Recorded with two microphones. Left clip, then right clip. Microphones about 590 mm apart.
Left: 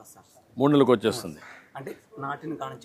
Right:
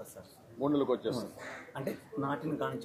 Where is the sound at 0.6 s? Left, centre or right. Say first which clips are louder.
Left 11 dB; left.